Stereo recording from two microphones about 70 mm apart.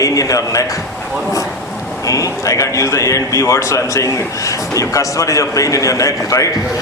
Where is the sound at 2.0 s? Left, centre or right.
Left.